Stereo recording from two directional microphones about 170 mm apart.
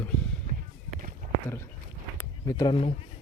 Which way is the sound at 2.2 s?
15° left (ahead or behind).